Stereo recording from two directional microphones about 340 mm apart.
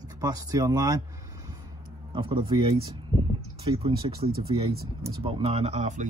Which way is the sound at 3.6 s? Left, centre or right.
Centre.